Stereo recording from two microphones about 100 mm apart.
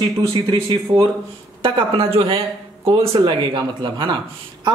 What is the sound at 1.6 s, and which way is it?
Speech, 65° right (ahead or behind).